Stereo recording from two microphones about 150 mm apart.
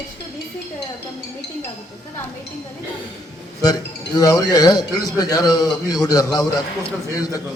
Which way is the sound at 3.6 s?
25° left (ahead or behind).